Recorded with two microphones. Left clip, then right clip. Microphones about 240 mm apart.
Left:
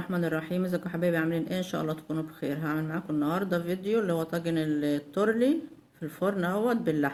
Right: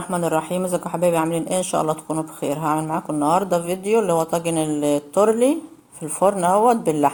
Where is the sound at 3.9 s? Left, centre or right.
Right.